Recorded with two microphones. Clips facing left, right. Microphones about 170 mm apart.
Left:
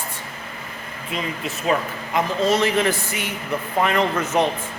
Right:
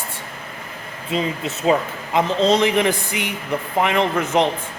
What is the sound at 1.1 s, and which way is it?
A man's voice, 25° right (ahead or behind).